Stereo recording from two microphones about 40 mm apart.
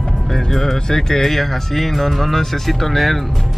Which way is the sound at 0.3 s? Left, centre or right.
Centre.